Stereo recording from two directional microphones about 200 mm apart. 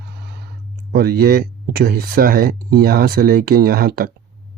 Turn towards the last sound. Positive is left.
turn(degrees=-50)  # may be behind; listen again after turning